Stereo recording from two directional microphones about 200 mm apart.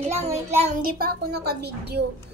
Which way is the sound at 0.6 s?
40° right (ahead or behind).